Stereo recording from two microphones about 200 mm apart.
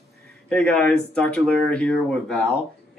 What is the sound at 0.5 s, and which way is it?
Speech, 5° left (ahead or behind).